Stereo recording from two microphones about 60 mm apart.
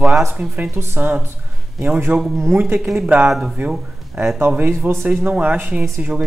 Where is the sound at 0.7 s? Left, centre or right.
Right.